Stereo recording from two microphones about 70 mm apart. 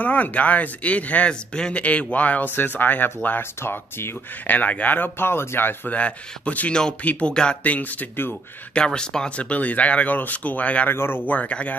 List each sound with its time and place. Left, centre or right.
0.0 s speech: left
4.5 s speech: left
5.9 s speech: centre
8.7 s speech: centre
10.9 s speech: left